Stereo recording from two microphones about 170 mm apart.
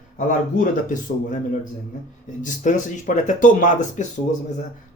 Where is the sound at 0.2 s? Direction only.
50° left (ahead or behind).